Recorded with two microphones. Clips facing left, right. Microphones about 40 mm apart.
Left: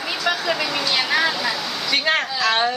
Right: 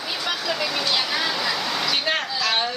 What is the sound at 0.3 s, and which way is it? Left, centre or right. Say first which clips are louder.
Vehicle: left 5 dB; left.